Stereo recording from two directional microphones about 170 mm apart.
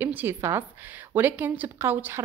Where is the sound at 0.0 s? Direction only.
10° right (ahead or behind).